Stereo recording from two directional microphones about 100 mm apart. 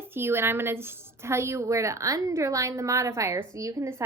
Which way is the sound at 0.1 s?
25° right (ahead or behind).